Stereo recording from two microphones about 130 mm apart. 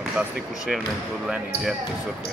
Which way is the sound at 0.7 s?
5° right (ahead or behind).